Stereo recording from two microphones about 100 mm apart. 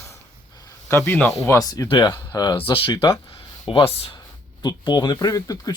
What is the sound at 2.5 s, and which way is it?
Speech, 65° left (ahead or behind).